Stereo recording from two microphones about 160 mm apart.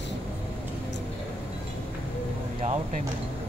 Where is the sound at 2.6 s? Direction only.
50° right (ahead or behind).